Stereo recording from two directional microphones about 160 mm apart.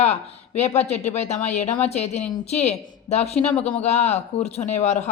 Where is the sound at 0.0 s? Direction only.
40° left (ahead or behind).